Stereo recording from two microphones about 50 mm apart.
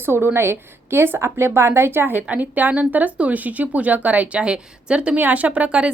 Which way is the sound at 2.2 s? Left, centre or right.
Right.